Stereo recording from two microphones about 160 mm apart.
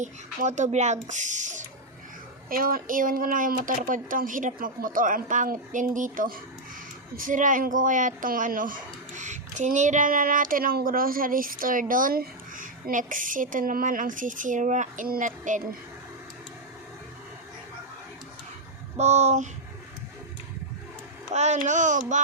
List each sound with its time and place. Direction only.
0.0 s speech: 50° right (ahead or behind)
2.5 s a woman's voice: 65° right (ahead or behind)
18.9 s speech: 45° right (ahead or behind)
21.3 s speech: 45° right (ahead or behind)